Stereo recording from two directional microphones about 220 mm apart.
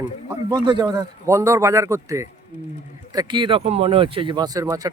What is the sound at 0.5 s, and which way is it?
Speech, 20° right (ahead or behind).